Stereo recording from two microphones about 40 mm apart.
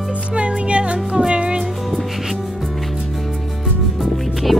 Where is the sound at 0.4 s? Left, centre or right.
Right.